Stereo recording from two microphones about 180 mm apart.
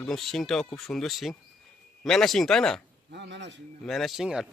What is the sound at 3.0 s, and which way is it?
Speech, 75° right (ahead or behind).